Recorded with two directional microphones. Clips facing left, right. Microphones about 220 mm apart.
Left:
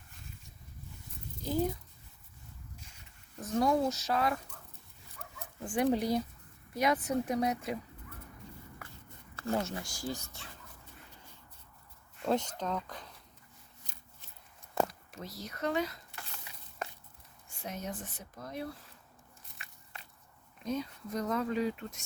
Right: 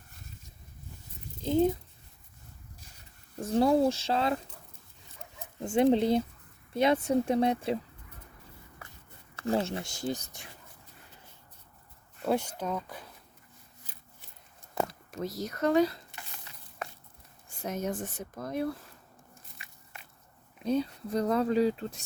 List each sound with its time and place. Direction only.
1.4 s speech: 25° right (ahead or behind)
2.7 s a sound: 35° right (ahead or behind)
5.1 s dog: 25° right (ahead or behind)
6.7 s speech: 25° right (ahead or behind)
9.3 s speech: 25° right (ahead or behind)
12.2 s speech: 10° right (ahead or behind)
15.1 s speech: 45° right (ahead or behind)
16.5 s a sound: 15° left (ahead or behind)
17.6 s speech: 45° right (ahead or behind)
20.7 s speech: 30° right (ahead or behind)